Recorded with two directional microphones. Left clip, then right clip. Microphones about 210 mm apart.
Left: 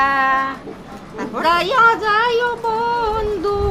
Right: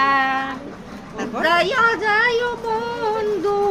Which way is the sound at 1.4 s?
20° left (ahead or behind).